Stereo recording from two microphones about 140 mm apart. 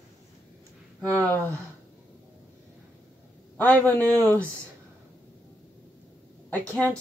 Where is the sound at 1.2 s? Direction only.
10° left (ahead or behind).